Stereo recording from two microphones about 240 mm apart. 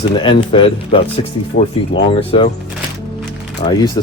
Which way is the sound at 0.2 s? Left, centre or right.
Left.